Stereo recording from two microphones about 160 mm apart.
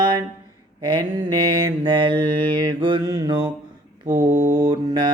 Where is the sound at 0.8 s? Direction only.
30° right (ahead or behind).